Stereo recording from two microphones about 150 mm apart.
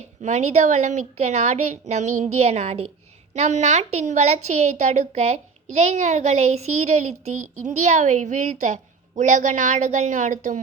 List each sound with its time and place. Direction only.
0.2 s a woman's voice: 50° right (ahead or behind)